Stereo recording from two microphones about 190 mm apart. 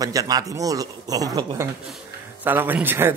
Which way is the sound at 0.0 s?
20° right (ahead or behind).